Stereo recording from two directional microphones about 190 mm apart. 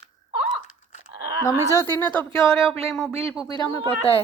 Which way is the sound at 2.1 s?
Centre (ahead or behind).